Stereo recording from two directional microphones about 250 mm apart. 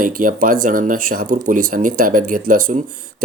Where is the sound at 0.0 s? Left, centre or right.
Right.